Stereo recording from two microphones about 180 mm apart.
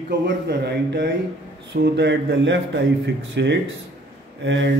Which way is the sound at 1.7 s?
75° right (ahead or behind).